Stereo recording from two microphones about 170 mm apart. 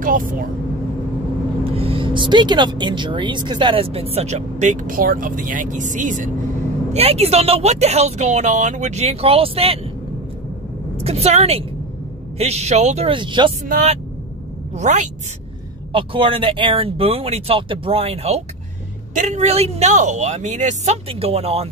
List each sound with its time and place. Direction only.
0.0 s speech: 55° right (ahead or behind)
1.6 s speech: 35° right (ahead or behind)
6.9 s speech: 35° right (ahead or behind)
11.1 s speech: 40° right (ahead or behind)
13.7 s speech: 45° right (ahead or behind)
15.9 s speech: 30° right (ahead or behind)